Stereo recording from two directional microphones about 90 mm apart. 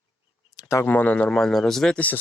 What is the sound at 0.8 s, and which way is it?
Speech, 20° left (ahead or behind).